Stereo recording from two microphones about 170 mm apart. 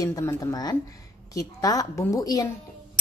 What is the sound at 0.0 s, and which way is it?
Speech, 15° left (ahead or behind).